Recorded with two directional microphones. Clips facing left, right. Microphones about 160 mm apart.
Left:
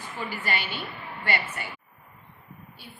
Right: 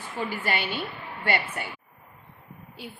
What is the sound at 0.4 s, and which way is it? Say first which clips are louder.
Speech: right 2 dB; 55° right (ahead or behind).